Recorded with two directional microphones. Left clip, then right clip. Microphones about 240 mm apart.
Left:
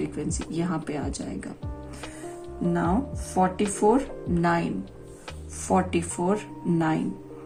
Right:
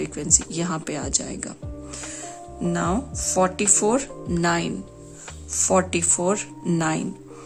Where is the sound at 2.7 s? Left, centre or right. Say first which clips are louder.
Right 1 dB; right.